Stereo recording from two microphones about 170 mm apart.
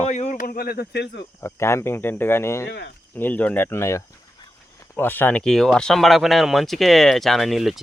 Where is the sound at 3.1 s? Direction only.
10° left (ahead or behind).